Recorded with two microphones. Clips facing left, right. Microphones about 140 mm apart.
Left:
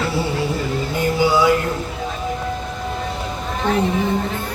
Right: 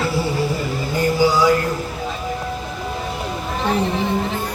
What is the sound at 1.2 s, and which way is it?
Mantra, centre (ahead or behind).